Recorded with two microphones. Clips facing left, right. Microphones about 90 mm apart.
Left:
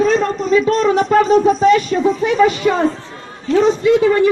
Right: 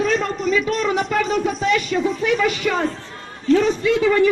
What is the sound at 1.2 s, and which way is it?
A man's voice, 25° left (ahead or behind).